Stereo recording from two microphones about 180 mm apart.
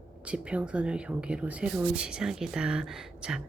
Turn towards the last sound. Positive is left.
turn(degrees=-5)  # may be behind; listen again after turning